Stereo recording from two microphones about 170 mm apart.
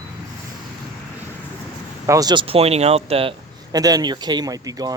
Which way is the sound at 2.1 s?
20° right (ahead or behind).